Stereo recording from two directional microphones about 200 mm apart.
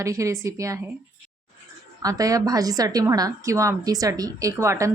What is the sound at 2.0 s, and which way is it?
A woman's voice, 15° right (ahead or behind).